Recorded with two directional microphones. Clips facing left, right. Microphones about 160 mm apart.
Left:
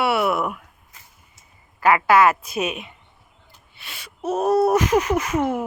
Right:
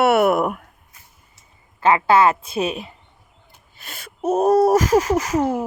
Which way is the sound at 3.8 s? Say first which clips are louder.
Right 4 dB; 45° right (ahead or behind).